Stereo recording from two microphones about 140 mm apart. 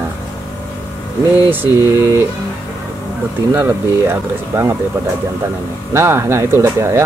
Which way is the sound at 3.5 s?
15° right (ahead or behind).